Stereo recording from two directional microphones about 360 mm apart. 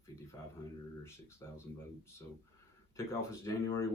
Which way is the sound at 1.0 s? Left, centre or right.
Centre.